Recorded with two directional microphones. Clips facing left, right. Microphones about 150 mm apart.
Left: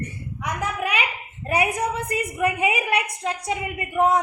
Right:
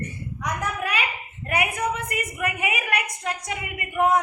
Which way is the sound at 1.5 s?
35° left (ahead or behind).